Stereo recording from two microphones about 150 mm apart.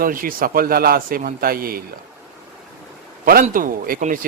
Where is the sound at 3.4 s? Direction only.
65° right (ahead or behind).